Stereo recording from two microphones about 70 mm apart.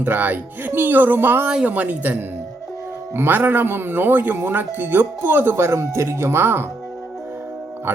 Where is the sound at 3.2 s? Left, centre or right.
Right.